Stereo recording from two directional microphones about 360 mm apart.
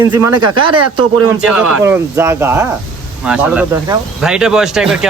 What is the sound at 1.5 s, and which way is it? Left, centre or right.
Speech, centre.